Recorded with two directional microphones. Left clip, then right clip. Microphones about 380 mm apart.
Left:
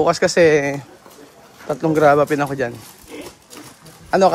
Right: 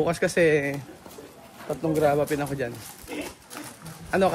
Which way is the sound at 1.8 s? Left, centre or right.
Centre.